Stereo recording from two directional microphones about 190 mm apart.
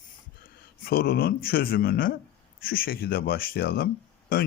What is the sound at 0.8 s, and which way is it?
Speech, 55° left (ahead or behind).